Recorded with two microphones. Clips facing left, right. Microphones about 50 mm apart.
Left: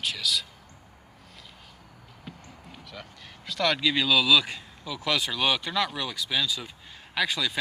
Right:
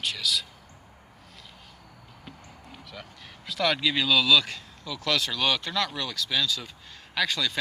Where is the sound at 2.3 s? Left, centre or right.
Centre.